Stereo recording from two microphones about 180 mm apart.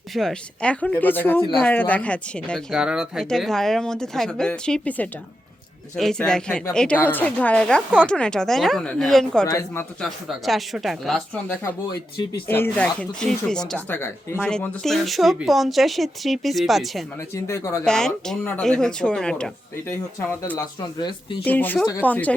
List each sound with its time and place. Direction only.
0.1 s speech: centre (ahead or behind)
2.7 s speech: 5° right (ahead or behind)
9.5 s speech: 15° left (ahead or behind)
10.0 s speech: centre (ahead or behind)
17.3 s speech: 15° left (ahead or behind)
17.8 s speech: 5° left (ahead or behind)
20.1 s speech: 20° left (ahead or behind)
21.4 s speech: 10° left (ahead or behind)